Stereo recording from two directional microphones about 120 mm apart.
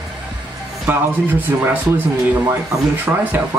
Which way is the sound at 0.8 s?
15° right (ahead or behind).